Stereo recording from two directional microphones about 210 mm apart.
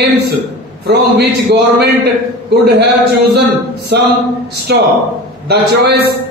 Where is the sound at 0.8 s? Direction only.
50° right (ahead or behind).